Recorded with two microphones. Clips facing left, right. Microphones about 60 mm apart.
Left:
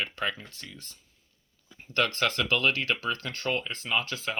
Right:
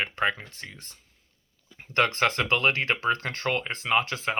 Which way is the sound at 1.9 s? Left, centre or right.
Right.